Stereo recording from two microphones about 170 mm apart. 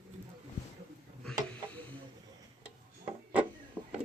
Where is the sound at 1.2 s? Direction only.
5° left (ahead or behind).